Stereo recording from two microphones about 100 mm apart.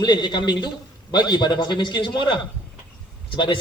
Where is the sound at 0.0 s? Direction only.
45° left (ahead or behind).